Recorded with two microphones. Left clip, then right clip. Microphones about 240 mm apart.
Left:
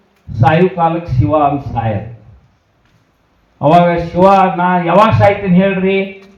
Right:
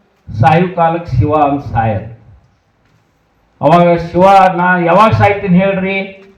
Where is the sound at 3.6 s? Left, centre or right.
Right.